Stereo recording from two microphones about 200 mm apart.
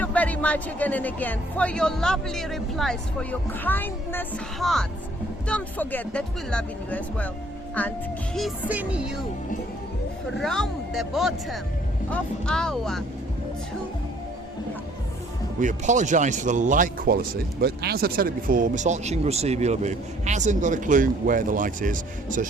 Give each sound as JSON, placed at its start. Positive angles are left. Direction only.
{"t": 0.0, "sound": "speech", "side_deg": 5}
{"t": 8.4, "sound": "speech", "side_deg": -5}
{"t": 10.3, "sound": "speech", "side_deg": 0}
{"t": 15.6, "sound": "a man's voice", "side_deg": -35}